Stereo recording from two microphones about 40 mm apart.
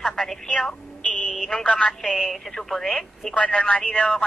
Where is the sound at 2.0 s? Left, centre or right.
Centre.